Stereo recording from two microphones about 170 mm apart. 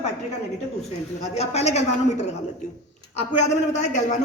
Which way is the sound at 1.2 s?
40° left (ahead or behind).